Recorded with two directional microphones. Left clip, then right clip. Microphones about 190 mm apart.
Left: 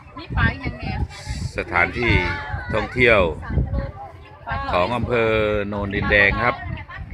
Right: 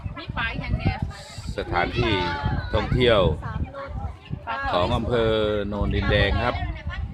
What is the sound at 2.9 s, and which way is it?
Speech, centre (ahead or behind).